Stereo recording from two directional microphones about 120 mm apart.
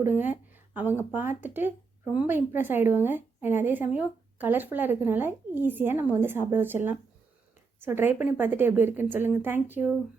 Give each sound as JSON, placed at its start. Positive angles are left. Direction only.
{"t": 0.0, "sound": "speech", "side_deg": -15}